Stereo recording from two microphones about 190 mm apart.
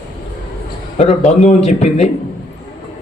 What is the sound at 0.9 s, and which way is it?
Speech, 35° left (ahead or behind).